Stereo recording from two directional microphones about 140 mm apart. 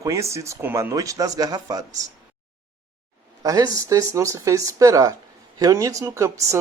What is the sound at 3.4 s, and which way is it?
Speech, 25° right (ahead or behind).